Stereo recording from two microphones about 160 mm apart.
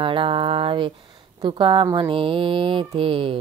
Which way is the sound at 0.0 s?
35° right (ahead or behind).